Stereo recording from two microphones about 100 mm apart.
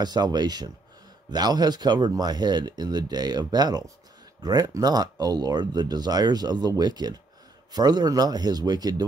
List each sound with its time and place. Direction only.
0.0 s speech: 45° right (ahead or behind)